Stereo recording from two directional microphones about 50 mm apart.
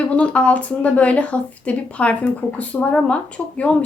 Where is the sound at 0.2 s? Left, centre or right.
Left.